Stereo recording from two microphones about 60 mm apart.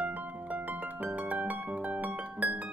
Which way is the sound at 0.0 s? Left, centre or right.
Right.